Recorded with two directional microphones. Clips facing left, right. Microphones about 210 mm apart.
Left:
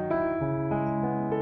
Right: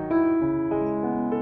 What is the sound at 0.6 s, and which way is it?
Electric piano, centre (ahead or behind).